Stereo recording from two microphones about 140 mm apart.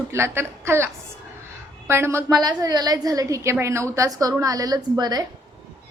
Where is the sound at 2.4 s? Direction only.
30° right (ahead or behind).